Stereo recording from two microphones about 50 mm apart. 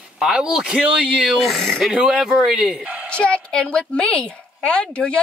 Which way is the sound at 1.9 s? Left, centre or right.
Centre.